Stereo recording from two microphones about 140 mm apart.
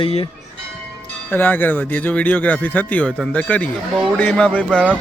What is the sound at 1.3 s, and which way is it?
Speech, 15° left (ahead or behind).